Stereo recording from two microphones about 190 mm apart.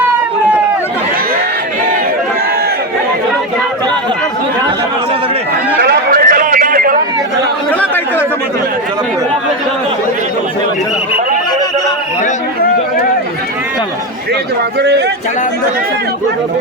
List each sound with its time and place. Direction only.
5.8 s a sound: 55° right (ahead or behind)
7.7 s chatter: 10° left (ahead or behind)
14.8 s speech: 60° right (ahead or behind)